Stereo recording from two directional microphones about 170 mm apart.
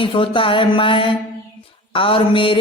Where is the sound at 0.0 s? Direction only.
30° left (ahead or behind).